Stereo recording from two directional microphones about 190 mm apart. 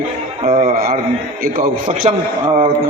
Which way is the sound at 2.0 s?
25° right (ahead or behind).